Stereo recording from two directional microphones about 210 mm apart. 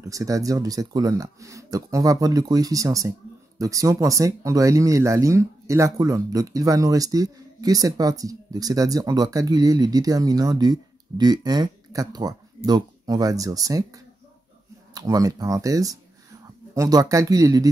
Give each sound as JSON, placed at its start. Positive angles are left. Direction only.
{"t": 0.0, "sound": "speech", "side_deg": -15}